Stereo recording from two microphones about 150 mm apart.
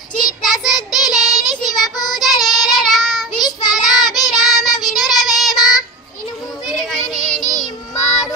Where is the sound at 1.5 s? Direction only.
25° left (ahead or behind).